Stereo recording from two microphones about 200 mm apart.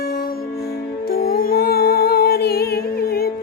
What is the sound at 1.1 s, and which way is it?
Music, 50° left (ahead or behind).